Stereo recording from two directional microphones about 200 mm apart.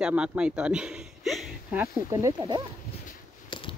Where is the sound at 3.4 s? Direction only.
25° left (ahead or behind).